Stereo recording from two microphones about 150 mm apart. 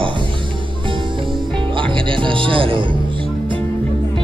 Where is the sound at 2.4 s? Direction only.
35° right (ahead or behind).